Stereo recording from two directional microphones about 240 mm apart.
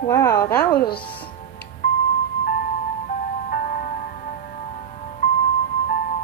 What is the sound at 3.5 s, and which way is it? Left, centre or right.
Music, left.